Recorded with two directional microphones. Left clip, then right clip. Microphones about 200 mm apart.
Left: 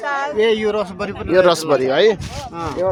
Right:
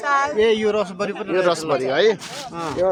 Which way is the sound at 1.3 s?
45° left (ahead or behind).